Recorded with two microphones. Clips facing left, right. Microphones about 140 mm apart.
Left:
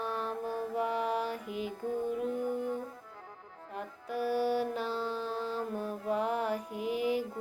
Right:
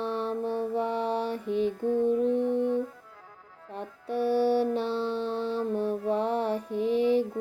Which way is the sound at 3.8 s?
30° right (ahead or behind).